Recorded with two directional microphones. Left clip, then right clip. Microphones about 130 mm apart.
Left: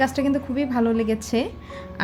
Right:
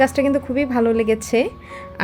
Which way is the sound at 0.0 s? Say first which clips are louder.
Right 5 dB; 35° right (ahead or behind).